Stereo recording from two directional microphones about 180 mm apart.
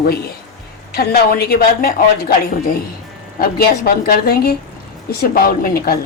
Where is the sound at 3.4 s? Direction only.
60° left (ahead or behind).